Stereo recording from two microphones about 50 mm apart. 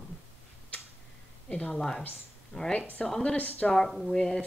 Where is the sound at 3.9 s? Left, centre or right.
Centre.